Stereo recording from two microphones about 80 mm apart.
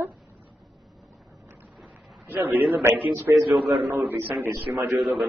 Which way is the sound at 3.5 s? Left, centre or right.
Centre.